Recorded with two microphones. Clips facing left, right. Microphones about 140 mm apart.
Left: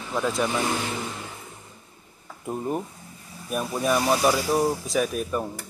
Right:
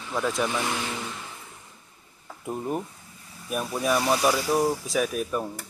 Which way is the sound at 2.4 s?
5° left (ahead or behind).